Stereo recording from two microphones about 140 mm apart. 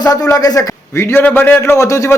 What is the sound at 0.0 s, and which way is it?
A man's voice, 25° left (ahead or behind).